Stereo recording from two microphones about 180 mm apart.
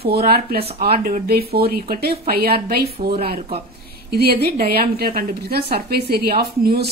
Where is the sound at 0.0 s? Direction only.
60° right (ahead or behind).